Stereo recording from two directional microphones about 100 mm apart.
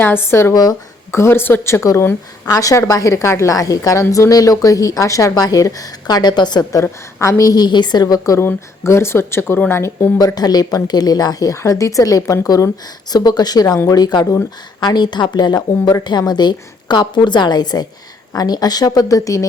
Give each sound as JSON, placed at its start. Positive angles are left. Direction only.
{"t": 0.0, "sound": "speech", "side_deg": 20}
{"t": 0.5, "sound": "a woman's voice", "side_deg": 40}
{"t": 1.1, "sound": "a woman's voice", "side_deg": 25}
{"t": 7.2, "sound": "a woman's voice", "side_deg": 30}
{"t": 10.2, "sound": "a woman's voice", "side_deg": 40}